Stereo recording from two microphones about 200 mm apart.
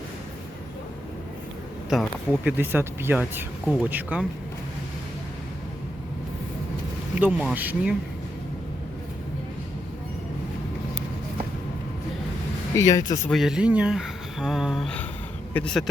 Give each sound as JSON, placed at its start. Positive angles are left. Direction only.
{"t": 1.9, "sound": "speech", "side_deg": -5}
{"t": 7.2, "sound": "speech", "side_deg": -5}
{"t": 12.7, "sound": "speech", "side_deg": 15}
{"t": 13.3, "sound": "speech", "side_deg": 0}